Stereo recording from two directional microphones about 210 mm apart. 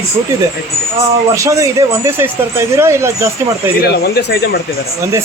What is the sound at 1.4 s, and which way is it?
Speech, 15° right (ahead or behind).